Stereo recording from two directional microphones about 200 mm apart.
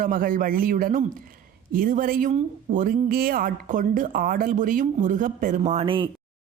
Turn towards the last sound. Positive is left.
turn(degrees=-25)  # may be behind; listen again after turning